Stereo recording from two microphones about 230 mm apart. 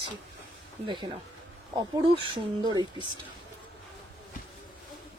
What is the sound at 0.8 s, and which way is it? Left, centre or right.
A woman's voice, centre.